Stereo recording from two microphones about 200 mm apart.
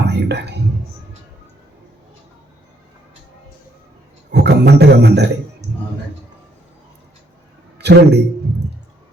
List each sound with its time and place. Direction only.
0.1 s whispering: 55° right (ahead or behind)
4.3 s a man's voice: 55° right (ahead or behind)
7.8 s a man's voice: 55° right (ahead or behind)